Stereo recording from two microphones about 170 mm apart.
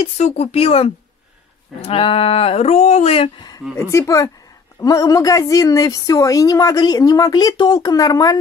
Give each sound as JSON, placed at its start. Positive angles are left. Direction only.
{"t": 0.0, "sound": "speech", "side_deg": 40}
{"t": 3.7, "sound": "a woman's voice", "side_deg": 20}